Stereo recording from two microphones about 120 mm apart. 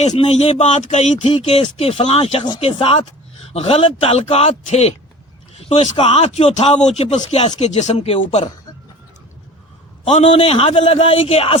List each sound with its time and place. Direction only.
0.0 s a man's voice: 65° left (ahead or behind)
10.1 s a man's voice: 55° left (ahead or behind)